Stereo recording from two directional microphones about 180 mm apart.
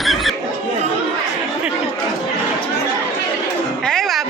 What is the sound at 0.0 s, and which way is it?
Chatter, centre (ahead or behind).